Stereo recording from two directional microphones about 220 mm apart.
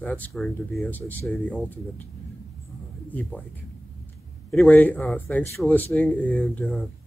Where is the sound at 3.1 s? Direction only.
5° left (ahead or behind).